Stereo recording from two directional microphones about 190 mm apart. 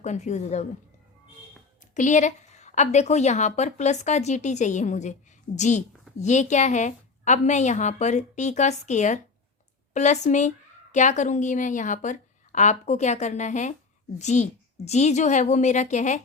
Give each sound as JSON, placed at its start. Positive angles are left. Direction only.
{"t": 0.0, "sound": "a woman's voice", "side_deg": 40}
{"t": 2.0, "sound": "a woman's voice", "side_deg": 40}